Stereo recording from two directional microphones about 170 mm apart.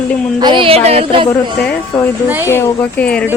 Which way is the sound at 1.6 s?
5° left (ahead or behind).